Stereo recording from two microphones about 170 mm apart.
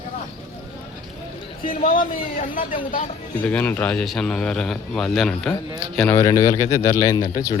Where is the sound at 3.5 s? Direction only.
10° left (ahead or behind).